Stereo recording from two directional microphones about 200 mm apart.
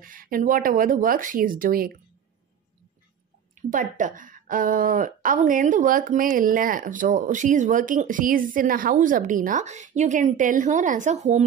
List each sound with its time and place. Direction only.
0.0 s speech: 45° right (ahead or behind)
3.7 s a woman's voice: 40° right (ahead or behind)